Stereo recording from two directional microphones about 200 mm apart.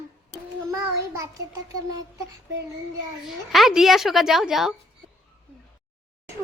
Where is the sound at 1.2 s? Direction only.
15° right (ahead or behind).